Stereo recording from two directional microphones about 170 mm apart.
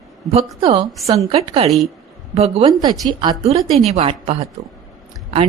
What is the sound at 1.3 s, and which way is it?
A woman's voice, 35° right (ahead or behind).